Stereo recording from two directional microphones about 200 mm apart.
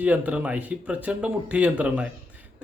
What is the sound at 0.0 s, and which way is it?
Speech, 10° right (ahead or behind).